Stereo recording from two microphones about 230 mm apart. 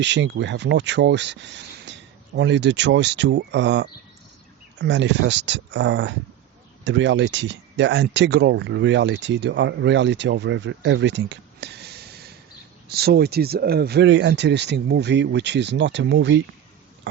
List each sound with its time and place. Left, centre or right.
0.0 s speech: right